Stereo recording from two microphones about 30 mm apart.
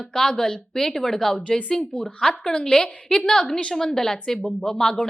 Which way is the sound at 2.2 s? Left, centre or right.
Left.